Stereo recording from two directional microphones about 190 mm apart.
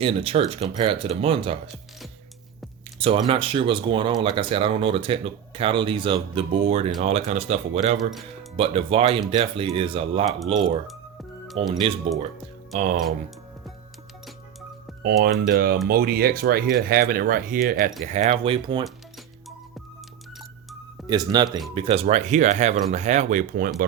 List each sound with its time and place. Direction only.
0.0 s speech: 30° right (ahead or behind)
3.0 s speech: 30° right (ahead or behind)
11.7 s speech: 30° right (ahead or behind)
12.7 s speech: 40° right (ahead or behind)
15.0 s speech: 50° right (ahead or behind); by 18.9 s 25° right (ahead or behind)
21.1 s speech: 20° right (ahead or behind); by 23.7 s 45° right (ahead or behind)